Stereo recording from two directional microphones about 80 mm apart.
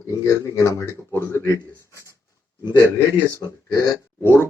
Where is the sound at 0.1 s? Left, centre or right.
Left.